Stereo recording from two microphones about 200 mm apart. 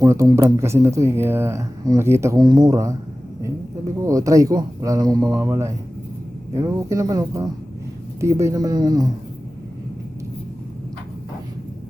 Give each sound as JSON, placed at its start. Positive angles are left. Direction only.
{"t": 0.0, "sound": "speech", "side_deg": -15}
{"t": 4.0, "sound": "speech", "side_deg": -15}